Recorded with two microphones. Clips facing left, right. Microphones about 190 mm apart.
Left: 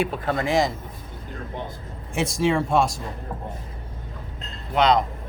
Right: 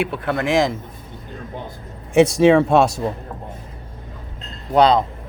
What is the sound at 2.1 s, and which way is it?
Speech, 70° right (ahead or behind).